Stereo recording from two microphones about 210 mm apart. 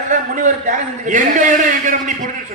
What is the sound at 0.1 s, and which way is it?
A man's voice, 35° right (ahead or behind).